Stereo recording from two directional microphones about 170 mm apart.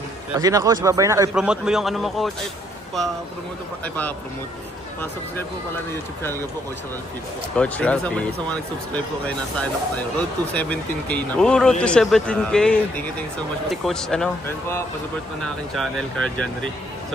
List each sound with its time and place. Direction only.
0.4 s a man's voice: 20° right (ahead or behind)
1.3 s a man's voice: 5° right (ahead or behind)
7.5 s speech: 10° left (ahead or behind)
10.5 s a man's voice: 10° left (ahead or behind)
15.4 s a man's voice: 5° left (ahead or behind)